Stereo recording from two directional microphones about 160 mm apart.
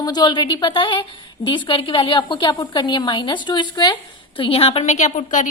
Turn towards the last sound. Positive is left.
turn(degrees=50)  # may be behind; listen again after turning